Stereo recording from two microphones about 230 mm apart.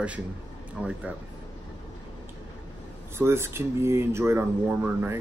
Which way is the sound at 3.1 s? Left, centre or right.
Centre.